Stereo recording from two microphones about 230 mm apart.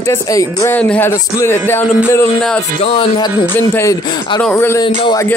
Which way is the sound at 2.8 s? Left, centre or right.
Left.